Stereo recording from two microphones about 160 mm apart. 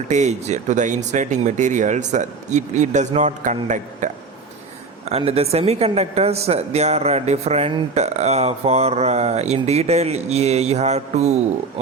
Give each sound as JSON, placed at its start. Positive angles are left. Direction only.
{"t": 0.1, "sound": "speech", "side_deg": -45}
{"t": 5.0, "sound": "speech", "side_deg": -40}